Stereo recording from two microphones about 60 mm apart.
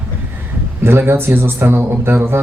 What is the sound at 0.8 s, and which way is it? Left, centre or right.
Speech, right.